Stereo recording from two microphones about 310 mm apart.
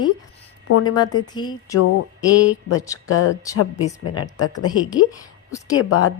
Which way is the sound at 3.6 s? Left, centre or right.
Left.